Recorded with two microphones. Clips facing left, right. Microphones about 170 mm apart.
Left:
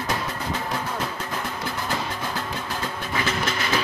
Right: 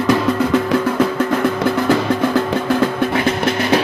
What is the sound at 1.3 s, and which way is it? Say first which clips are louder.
Music: right 14 dB; 75° right (ahead or behind).